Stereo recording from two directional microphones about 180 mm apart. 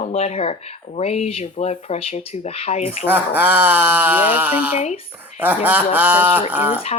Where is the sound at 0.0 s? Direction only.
35° left (ahead or behind).